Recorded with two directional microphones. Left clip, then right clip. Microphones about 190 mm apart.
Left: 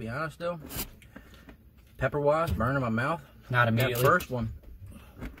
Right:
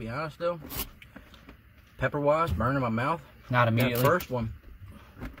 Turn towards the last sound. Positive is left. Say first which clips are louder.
# left 1 dB
turn(degrees=0)  # may be behind; listen again after turning